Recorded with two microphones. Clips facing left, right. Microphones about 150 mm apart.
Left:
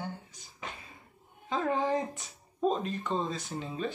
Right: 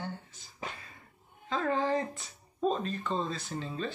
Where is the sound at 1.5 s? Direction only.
15° left (ahead or behind).